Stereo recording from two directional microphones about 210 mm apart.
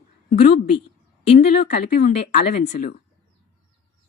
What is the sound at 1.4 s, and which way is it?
Speech, 50° left (ahead or behind).